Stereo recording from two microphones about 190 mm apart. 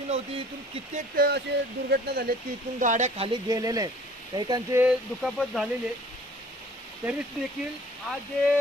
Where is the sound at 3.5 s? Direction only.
20° right (ahead or behind).